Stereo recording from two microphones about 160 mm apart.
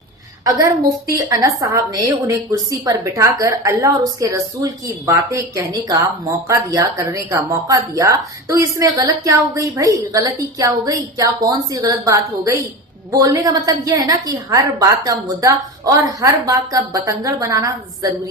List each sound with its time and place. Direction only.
1.0 s a woman's voice: 20° right (ahead or behind)